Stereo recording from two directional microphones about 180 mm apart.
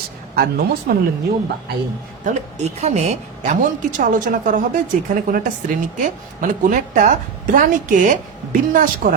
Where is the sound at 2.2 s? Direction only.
35° right (ahead or behind).